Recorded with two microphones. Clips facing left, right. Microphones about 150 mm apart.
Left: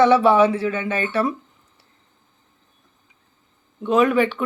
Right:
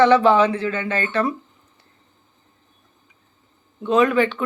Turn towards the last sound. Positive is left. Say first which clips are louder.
# even
turn(degrees=5)  # may be behind; listen again after turning